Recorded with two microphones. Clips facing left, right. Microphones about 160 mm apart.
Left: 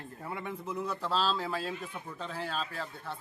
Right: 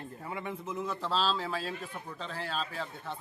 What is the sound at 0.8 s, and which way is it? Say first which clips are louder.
A man's voice: even; 10° left (ahead or behind).